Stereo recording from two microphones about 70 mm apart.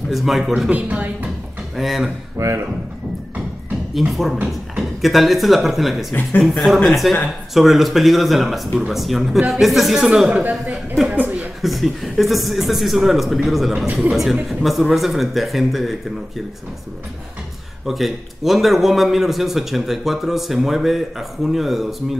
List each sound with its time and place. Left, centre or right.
0.1 s a man's voice: centre
0.7 s speech: right
1.8 s a man's voice: centre
2.3 s speech: right
4.1 s a man's voice: centre
11.1 s a sound: centre
11.6 s a man's voice: centre
17.8 s a man's voice: centre